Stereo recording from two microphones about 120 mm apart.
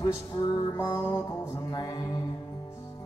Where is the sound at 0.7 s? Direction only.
20° left (ahead or behind).